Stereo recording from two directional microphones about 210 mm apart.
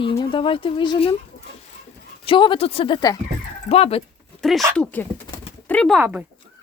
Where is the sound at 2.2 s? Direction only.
25° left (ahead or behind).